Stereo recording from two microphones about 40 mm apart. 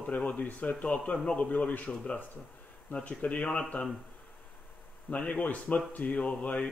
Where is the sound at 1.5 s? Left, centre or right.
Left.